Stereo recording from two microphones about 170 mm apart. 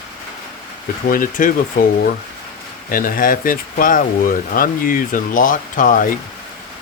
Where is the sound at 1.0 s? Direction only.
55° left (ahead or behind).